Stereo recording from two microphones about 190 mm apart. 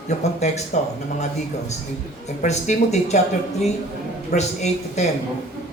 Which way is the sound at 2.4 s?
35° left (ahead or behind).